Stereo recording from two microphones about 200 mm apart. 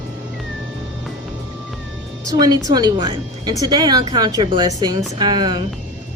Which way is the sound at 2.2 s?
20° right (ahead or behind).